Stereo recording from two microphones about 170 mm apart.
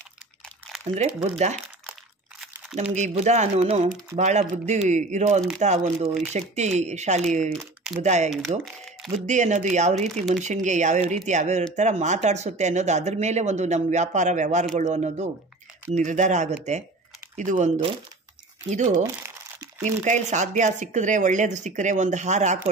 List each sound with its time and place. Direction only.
0.8 s speech: 40° right (ahead or behind)
2.7 s speech: 40° right (ahead or behind)
7.4 s speech: centre (ahead or behind)
8.0 s speech: 45° right (ahead or behind)
8.5 s speech: 30° right (ahead or behind)
9.1 s speech: 45° right (ahead or behind)